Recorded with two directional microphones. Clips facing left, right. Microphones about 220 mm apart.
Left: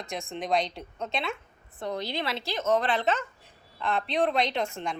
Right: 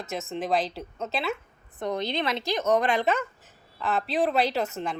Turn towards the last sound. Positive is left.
turn(degrees=-5)  # may be behind; listen again after turning